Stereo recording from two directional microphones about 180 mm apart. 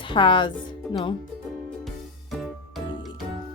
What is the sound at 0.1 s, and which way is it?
Speech, 25° left (ahead or behind).